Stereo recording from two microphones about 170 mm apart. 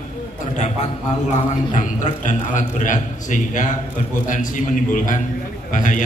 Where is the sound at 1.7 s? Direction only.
45° left (ahead or behind).